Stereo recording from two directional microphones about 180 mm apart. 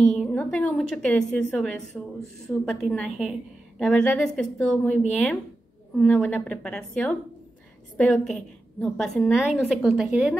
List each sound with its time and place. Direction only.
0.0 s a woman's voice: 5° left (ahead or behind)
2.8 s a woman's voice: centre (ahead or behind)